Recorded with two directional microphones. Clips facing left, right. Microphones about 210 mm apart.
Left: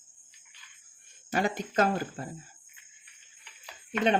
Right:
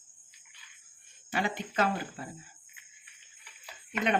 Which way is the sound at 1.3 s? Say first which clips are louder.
Left 3 dB; 45° left (ahead or behind).